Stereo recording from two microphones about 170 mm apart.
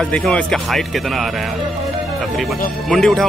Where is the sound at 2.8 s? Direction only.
5° left (ahead or behind).